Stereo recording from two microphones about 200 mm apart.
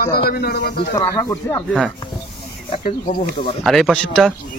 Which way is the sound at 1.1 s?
15° left (ahead or behind).